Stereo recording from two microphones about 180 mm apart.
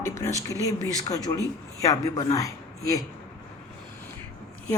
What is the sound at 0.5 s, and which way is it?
Speech, 20° right (ahead or behind).